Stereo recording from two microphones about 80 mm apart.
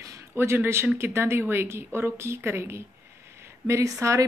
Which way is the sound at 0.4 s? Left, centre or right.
Right.